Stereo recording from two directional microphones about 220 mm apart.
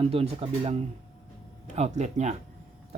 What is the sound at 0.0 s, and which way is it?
Speech, 25° right (ahead or behind).